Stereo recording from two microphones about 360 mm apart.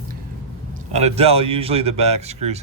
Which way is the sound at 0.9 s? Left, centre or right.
Centre.